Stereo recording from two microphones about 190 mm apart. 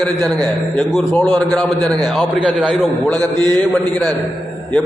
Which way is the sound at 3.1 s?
20° right (ahead or behind).